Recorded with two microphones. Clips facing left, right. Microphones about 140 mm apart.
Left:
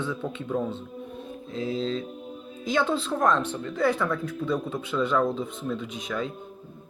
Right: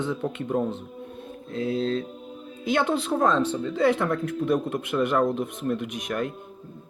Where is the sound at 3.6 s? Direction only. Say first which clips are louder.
Right 3 dB; 75° right (ahead or behind).